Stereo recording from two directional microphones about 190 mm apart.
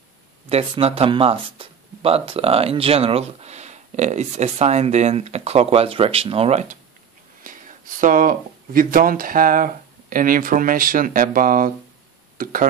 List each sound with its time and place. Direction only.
0.5 s speech: 30° right (ahead or behind)